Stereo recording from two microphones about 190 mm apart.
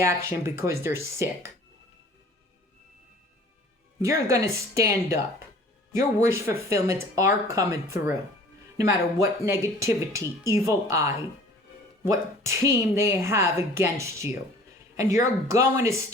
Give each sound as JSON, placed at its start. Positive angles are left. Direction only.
{"t": 0.0, "sound": "a woman's voice", "side_deg": -15}
{"t": 4.0, "sound": "a woman's voice", "side_deg": -15}
{"t": 6.1, "sound": "a woman's voice", "side_deg": -15}